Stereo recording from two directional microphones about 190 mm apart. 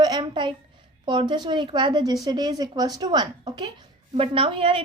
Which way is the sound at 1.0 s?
25° right (ahead or behind).